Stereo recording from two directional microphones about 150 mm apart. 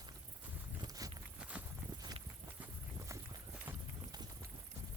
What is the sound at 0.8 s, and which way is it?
Clip-clop, 25° right (ahead or behind).